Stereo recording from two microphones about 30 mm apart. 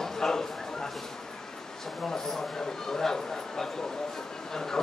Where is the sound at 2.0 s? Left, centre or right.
Centre.